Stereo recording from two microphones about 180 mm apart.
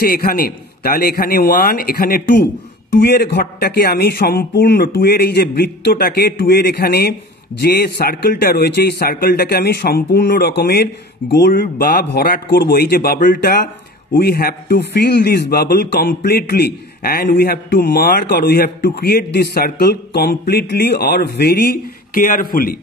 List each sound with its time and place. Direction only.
0.0 s a man's voice: 55° left (ahead or behind)